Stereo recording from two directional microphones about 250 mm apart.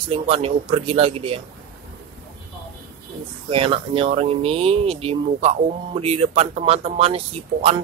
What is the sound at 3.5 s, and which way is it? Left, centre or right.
Speech, right.